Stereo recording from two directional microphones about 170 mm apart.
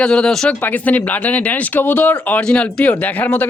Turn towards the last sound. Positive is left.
turn(degrees=10)  # may be behind; listen again after turning